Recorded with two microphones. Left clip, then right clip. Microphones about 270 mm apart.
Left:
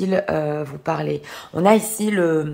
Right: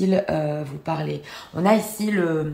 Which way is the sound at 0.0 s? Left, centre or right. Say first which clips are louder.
Left 1 dB; centre.